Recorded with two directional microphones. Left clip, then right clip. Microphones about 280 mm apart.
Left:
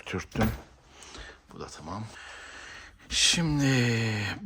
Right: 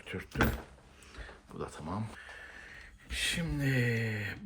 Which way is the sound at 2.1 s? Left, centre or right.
Centre.